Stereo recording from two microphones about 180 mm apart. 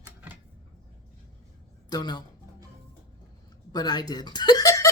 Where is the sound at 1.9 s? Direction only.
25° left (ahead or behind).